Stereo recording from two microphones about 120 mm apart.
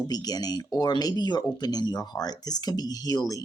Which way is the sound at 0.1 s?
35° left (ahead or behind).